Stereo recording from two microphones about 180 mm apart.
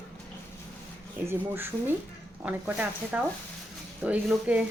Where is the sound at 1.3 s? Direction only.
10° right (ahead or behind).